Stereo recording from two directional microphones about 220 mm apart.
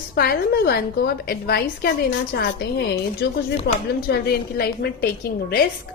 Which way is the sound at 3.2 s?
50° left (ahead or behind).